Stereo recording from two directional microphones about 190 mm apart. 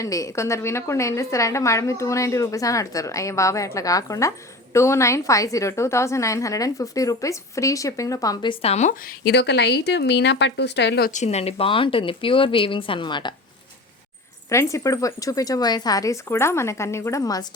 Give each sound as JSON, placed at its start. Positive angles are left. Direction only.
{"t": 0.0, "sound": "a woman's voice", "side_deg": 15}
{"t": 11.1, "sound": "speech", "side_deg": 35}
{"t": 14.5, "sound": "a woman's voice", "side_deg": 15}